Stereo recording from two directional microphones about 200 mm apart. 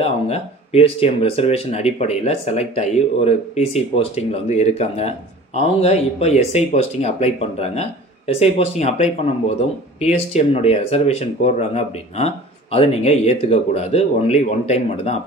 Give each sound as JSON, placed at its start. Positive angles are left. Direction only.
{"t": 0.0, "sound": "speech", "side_deg": 30}